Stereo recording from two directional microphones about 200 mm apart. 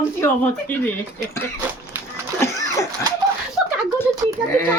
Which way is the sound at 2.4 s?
15° left (ahead or behind).